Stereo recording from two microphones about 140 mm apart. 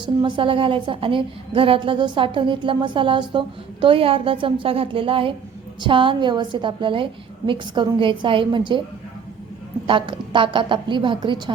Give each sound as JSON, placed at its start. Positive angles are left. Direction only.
{"t": 0.0, "sound": "a woman's voice", "side_deg": -35}
{"t": 9.8, "sound": "a woman's voice", "side_deg": -35}